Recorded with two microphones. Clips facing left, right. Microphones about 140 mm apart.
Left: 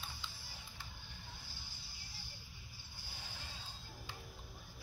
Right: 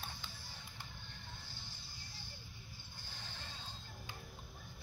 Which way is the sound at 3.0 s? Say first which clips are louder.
Even; 10° left (ahead or behind).